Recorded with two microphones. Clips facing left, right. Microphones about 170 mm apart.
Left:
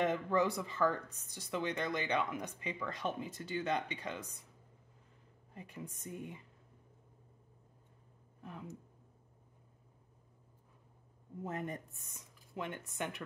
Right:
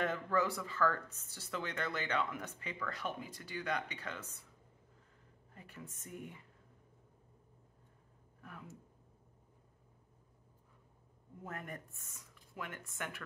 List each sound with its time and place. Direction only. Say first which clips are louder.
0.0 s speech: left 3 dB; 20° left (ahead or behind)
5.5 s speech: left 5 dB; 20° left (ahead or behind)
8.4 s speech: left 5 dB; 20° left (ahead or behind)
11.4 s speech: left 5 dB; 20° left (ahead or behind)